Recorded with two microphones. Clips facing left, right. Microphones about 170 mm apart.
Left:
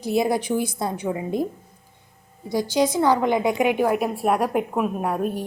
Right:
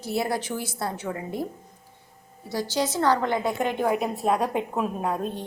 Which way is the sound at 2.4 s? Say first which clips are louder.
Left 6 dB; 15° left (ahead or behind).